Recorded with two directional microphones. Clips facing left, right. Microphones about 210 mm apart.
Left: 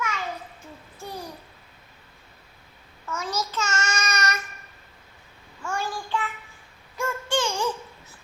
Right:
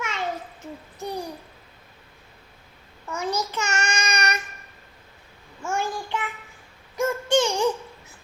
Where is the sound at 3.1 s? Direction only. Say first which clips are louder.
Right 3 dB; 15° right (ahead or behind).